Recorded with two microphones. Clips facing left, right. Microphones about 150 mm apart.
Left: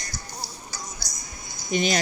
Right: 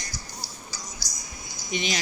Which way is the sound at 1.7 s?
50° left (ahead or behind).